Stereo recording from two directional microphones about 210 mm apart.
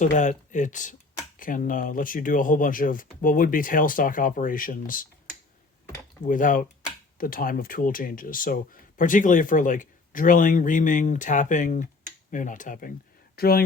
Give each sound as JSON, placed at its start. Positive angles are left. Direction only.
{"t": 0.0, "sound": "speech", "side_deg": 35}
{"t": 6.2, "sound": "speech", "side_deg": 40}